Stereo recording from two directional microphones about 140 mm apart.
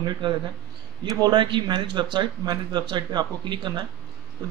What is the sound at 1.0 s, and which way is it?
Speech, 30° right (ahead or behind).